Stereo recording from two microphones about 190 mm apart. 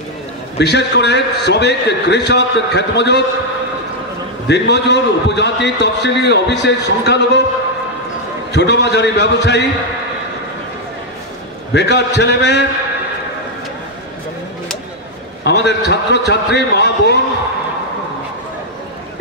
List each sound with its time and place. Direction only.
0.6 s a man's voice: 65° left (ahead or behind)
4.5 s a man's voice: 65° left (ahead or behind)
8.5 s a man's voice: 65° left (ahead or behind)
11.7 s a man's voice: 65° left (ahead or behind)
15.4 s a man's voice: 65° left (ahead or behind)